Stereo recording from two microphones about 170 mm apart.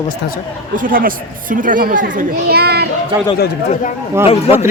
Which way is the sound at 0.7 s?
55° right (ahead or behind).